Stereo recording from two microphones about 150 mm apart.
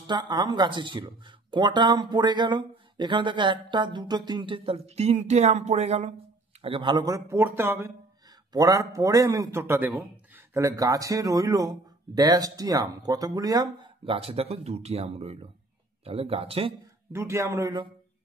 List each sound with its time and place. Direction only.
0.0 s speech: 30° right (ahead or behind); by 6.1 s 45° right (ahead or behind)
6.6 s a man's voice: 35° right (ahead or behind)
17.1 s a man's voice: 20° right (ahead or behind)